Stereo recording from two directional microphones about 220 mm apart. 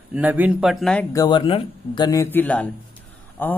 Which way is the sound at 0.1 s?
10° right (ahead or behind).